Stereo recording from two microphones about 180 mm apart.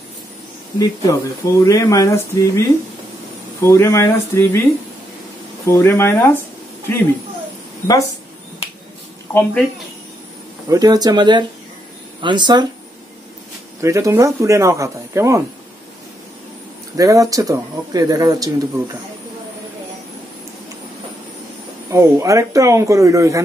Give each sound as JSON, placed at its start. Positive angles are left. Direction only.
{"t": 0.7, "sound": "speech", "side_deg": 20}
{"t": 3.6, "sound": "speech", "side_deg": 15}
{"t": 5.7, "sound": "speech", "side_deg": 15}
{"t": 7.8, "sound": "speech", "side_deg": 20}
{"t": 10.7, "sound": "speech", "side_deg": -20}
{"t": 13.7, "sound": "speech", "side_deg": -15}
{"t": 16.9, "sound": "speech", "side_deg": -20}
{"t": 21.9, "sound": "speech", "side_deg": -15}